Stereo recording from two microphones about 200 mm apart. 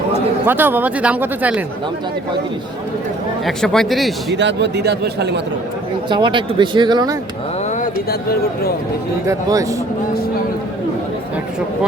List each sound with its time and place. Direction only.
0.4 s speech: 10° right (ahead or behind)
3.4 s a man's voice: centre (ahead or behind)
4.4 s a man's voice: 60° right (ahead or behind)
6.1 s speech: 25° right (ahead or behind)
9.2 s speech: 15° right (ahead or behind)